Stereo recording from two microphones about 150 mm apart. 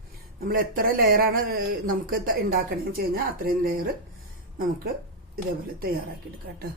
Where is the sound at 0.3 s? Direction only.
75° right (ahead or behind).